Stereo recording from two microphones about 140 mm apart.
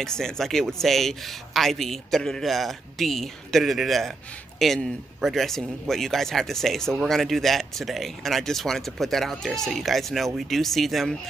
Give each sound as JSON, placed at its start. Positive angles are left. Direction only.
{"t": 0.0, "sound": "speech", "side_deg": 5}